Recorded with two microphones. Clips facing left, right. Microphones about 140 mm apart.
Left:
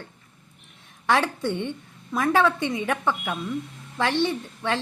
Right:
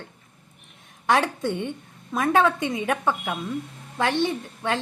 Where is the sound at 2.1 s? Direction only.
20° right (ahead or behind).